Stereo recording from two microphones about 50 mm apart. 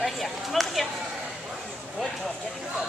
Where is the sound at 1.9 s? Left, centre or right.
Centre.